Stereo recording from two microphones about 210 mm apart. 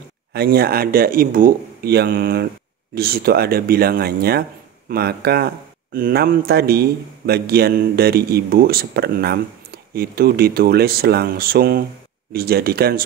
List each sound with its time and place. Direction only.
0.3 s speech: 50° right (ahead or behind)